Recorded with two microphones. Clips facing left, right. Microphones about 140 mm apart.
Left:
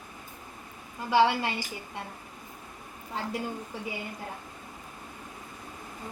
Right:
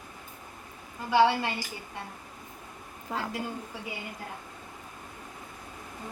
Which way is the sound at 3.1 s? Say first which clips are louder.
Right 2 dB; 90° right.